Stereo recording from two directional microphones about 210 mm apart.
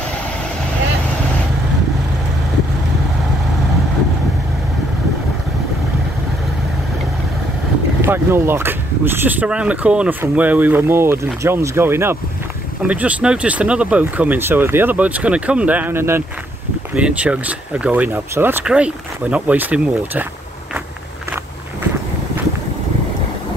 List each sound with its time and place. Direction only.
8.0 s speech: 10° right (ahead or behind)